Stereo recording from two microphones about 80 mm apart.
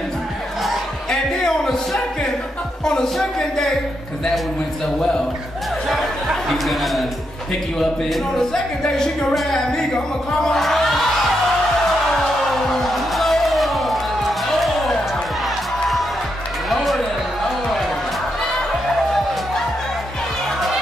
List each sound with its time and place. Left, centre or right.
1.1 s music: centre
2.8 s speech: centre
6.5 s speech: centre
8.1 s speech: centre
10.4 s music: centre
12.7 s music: centre
16.6 s a sound: centre